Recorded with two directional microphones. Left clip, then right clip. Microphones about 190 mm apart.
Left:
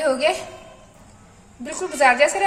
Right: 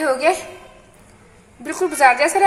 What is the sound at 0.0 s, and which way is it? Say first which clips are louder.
Speech: right 2 dB; 10° right (ahead or behind).